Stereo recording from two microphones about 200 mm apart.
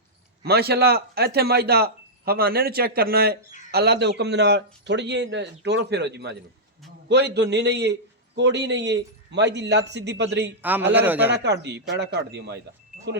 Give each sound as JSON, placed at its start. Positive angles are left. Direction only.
{"t": 0.4, "sound": "a man's voice", "side_deg": -50}
{"t": 10.6, "sound": "a man's voice", "side_deg": -10}
{"t": 11.3, "sound": "a man's voice", "side_deg": -60}